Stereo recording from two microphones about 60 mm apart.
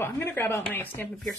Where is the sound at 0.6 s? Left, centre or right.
Left.